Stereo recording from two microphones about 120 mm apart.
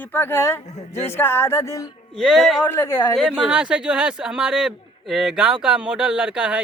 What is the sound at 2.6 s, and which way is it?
Speech, 20° left (ahead or behind).